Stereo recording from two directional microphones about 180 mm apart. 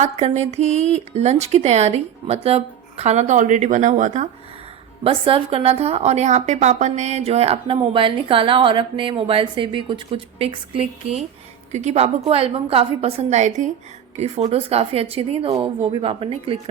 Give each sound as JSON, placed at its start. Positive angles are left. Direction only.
{"t": 0.0, "sound": "a woman's voice", "side_deg": -35}
{"t": 5.0, "sound": "a woman's voice", "side_deg": -30}